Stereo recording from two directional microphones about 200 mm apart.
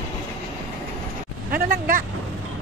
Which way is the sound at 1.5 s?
45° right (ahead or behind).